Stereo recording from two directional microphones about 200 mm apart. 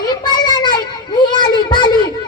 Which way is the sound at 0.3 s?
20° left (ahead or behind).